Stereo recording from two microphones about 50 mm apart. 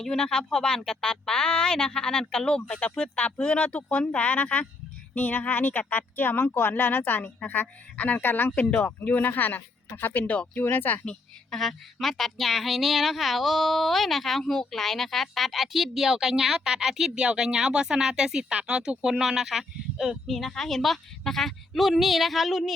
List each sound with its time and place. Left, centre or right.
0.0 s speech: centre
3.0 s speech: left
7.9 s speech: left
8.2 s speech: left
10.6 s speech: left
11.5 s a woman's voice: centre